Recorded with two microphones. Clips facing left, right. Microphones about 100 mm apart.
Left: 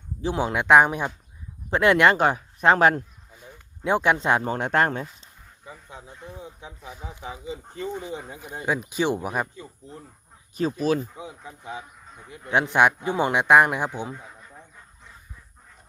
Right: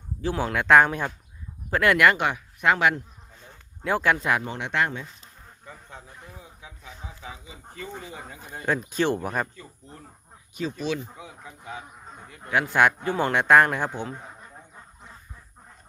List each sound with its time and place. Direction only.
0.2 s speech: 20° left (ahead or behind); by 3.0 s 40° left (ahead or behind)
3.3 s speech: 15° left (ahead or behind); by 5.0 s 45° left (ahead or behind)
5.6 s speech: 10° left (ahead or behind)
6.1 s speech: 25° left (ahead or behind)
6.8 s speech: 10° left (ahead or behind)
7.4 s speech: 25° left (ahead or behind)
10.5 s speech: 40° left (ahead or behind)
11.2 s speech: 20° left (ahead or behind)